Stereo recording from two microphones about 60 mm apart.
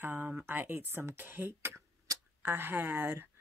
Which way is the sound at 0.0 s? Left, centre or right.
Right.